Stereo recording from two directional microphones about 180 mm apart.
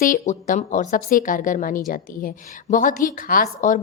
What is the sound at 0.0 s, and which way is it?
A woman's voice, 45° left (ahead or behind).